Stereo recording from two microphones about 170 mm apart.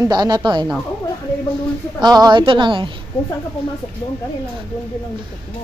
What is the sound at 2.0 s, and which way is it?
Speech, 25° right (ahead or behind).